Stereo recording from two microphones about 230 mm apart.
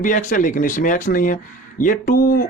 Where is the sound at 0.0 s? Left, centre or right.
Left.